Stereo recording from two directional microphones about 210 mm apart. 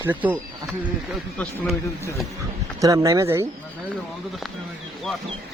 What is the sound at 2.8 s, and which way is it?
Speech, 15° right (ahead or behind).